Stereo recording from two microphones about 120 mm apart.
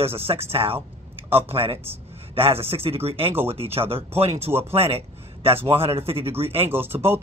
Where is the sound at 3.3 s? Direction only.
20° right (ahead or behind).